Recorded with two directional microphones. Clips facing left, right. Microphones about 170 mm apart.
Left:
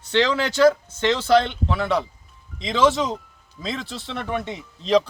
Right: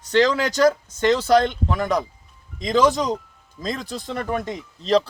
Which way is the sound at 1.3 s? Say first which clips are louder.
Left 1 dB; 40° right (ahead or behind).